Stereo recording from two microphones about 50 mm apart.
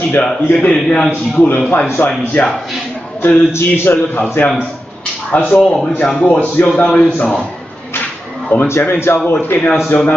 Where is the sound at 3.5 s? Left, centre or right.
Left.